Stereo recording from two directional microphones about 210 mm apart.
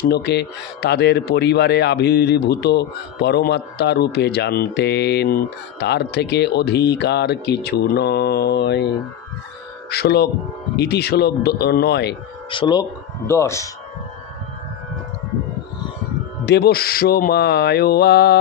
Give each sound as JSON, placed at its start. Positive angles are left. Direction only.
{"t": 0.1, "sound": "speech", "side_deg": 50}
{"t": 9.8, "sound": "speech", "side_deg": 50}
{"t": 12.4, "sound": "speech", "side_deg": 20}
{"t": 16.4, "sound": "speech", "side_deg": 50}